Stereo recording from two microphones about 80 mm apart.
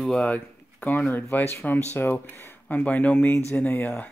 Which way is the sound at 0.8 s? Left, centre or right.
Left.